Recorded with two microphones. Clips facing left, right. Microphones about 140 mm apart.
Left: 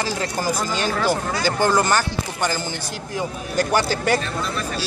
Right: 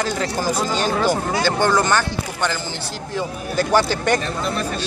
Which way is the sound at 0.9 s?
15° right (ahead or behind).